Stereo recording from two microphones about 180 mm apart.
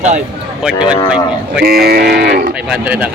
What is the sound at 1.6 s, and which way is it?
Speech, 60° right (ahead or behind).